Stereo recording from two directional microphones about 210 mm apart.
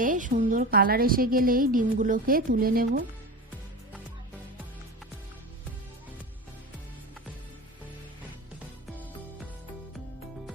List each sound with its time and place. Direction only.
0.0 s a woman's voice: 40° right (ahead or behind)